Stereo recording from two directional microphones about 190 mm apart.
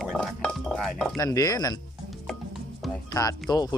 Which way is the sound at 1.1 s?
20° left (ahead or behind).